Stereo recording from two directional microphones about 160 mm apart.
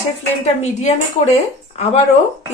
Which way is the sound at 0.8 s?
45° left (ahead or behind).